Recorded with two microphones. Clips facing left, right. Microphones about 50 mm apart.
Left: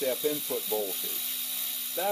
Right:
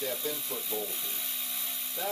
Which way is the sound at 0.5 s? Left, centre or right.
Left.